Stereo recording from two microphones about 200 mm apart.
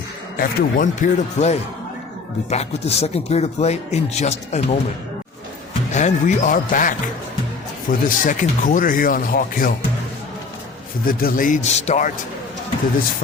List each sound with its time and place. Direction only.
0.3 s speech: 40° left (ahead or behind)
5.9 s speech: 35° left (ahead or behind)
11.0 s speech: 45° left (ahead or behind)